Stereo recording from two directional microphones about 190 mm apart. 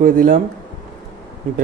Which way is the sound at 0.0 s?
45° right (ahead or behind).